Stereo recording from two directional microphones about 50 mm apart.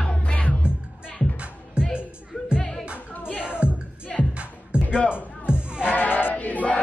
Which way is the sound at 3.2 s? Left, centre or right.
Left.